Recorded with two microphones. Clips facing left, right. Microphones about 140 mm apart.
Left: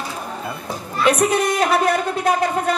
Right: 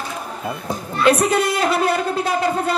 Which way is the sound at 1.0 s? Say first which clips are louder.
Right 1 dB; 30° right (ahead or behind).